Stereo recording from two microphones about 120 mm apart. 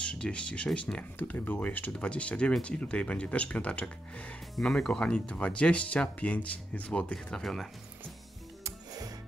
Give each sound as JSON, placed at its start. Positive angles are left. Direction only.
{"t": 0.0, "sound": "speech", "side_deg": 10}
{"t": 8.6, "sound": "music", "side_deg": -30}